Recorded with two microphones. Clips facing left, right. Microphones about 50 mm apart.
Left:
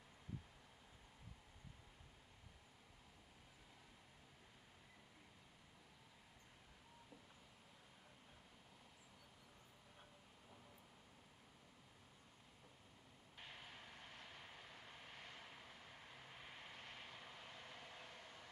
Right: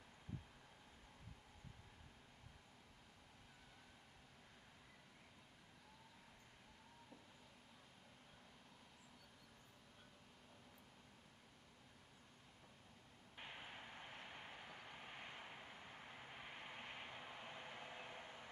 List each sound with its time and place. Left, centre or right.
13.4 s vehicle: right